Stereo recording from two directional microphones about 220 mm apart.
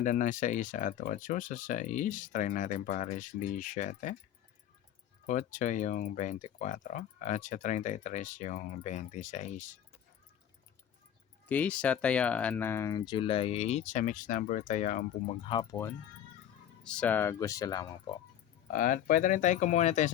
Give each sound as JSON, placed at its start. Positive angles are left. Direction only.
{"t": 0.0, "sound": "speech", "side_deg": 35}
{"t": 5.2, "sound": "speech", "side_deg": 35}
{"t": 11.4, "sound": "speech", "side_deg": 5}
{"t": 15.7, "sound": "speech", "side_deg": 10}
{"t": 18.7, "sound": "speech", "side_deg": 35}